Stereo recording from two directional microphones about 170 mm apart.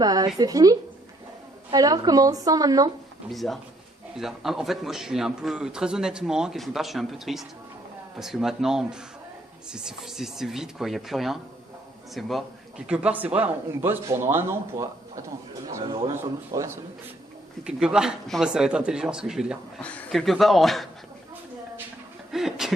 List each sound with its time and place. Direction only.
0.0 s a woman's voice: 20° right (ahead or behind)
3.2 s a man's voice: centre (ahead or behind)
12.9 s speech: 5° right (ahead or behind)
15.8 s speech: 30° right (ahead or behind)
16.0 s speech: 20° right (ahead or behind)
17.6 s a man's voice: 5° right (ahead or behind)
19.8 s a man's voice: 5° left (ahead or behind)
22.3 s a sound: centre (ahead or behind)